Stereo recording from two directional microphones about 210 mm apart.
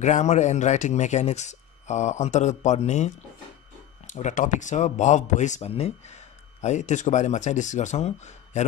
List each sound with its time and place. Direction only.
0.0 s speech: 35° left (ahead or behind)
4.1 s speech: 35° left (ahead or behind)